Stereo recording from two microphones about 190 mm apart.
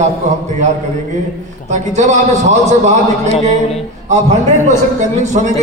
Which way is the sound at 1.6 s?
40° right (ahead or behind).